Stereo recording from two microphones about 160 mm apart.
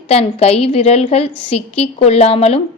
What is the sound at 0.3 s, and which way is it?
A woman's voice, 40° left (ahead or behind).